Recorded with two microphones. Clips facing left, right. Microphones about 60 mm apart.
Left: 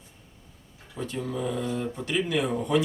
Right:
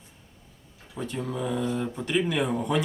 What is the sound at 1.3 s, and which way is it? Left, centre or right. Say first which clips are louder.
Speech: even; centre.